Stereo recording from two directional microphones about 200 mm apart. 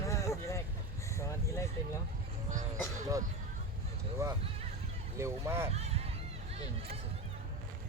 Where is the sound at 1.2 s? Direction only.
15° left (ahead or behind).